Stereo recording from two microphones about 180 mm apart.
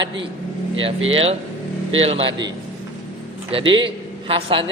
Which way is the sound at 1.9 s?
30° right (ahead or behind).